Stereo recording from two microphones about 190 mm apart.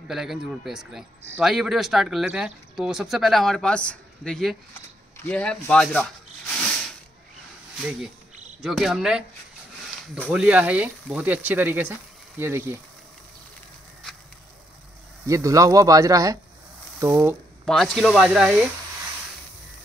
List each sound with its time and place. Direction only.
0.1 s speech: centre (ahead or behind)
8.6 s speech: centre (ahead or behind)
10.3 s speech: 5° right (ahead or behind)
15.2 s speech: 15° right (ahead or behind)
17.6 s speech: 5° left (ahead or behind)